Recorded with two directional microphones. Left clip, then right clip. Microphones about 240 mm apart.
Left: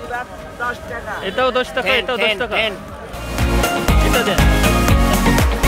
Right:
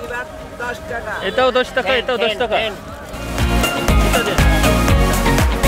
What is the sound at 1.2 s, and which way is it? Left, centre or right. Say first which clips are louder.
Speech: right 2 dB; centre.